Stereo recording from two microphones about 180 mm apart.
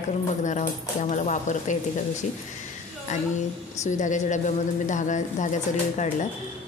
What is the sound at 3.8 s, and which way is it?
A woman's voice, 45° left (ahead or behind).